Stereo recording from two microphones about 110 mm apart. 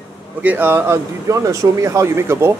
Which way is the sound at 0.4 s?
15° right (ahead or behind).